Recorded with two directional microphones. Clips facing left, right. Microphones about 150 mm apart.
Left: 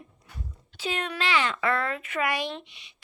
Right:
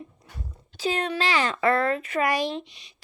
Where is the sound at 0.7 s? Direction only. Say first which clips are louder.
Right 5 dB; 40° right (ahead or behind).